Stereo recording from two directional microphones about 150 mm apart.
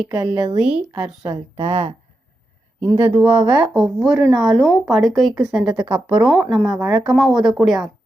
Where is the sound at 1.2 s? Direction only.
35° right (ahead or behind).